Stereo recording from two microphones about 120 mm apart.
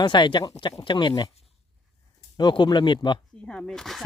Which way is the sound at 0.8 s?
40° left (ahead or behind).